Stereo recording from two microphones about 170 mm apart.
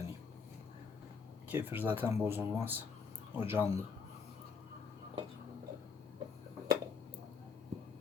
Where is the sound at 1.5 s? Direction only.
10° right (ahead or behind).